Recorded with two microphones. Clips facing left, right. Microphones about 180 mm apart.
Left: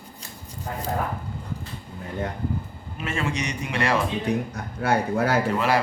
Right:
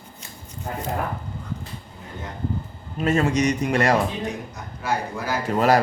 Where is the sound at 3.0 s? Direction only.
40° right (ahead or behind).